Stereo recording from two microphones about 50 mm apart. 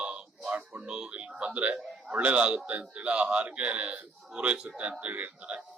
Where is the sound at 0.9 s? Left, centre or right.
Centre.